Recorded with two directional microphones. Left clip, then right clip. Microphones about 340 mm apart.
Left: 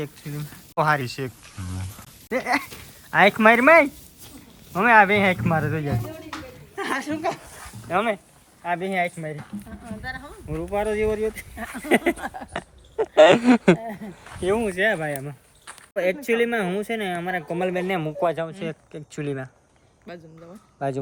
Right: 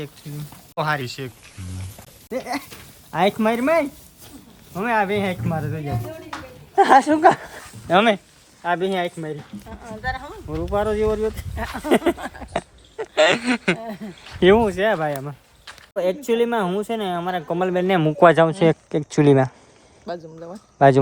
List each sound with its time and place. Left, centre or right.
0.0 s speech: centre
6.7 s speech: centre
13.0 s speech: centre
14.6 s speech: centre
20.5 s speech: right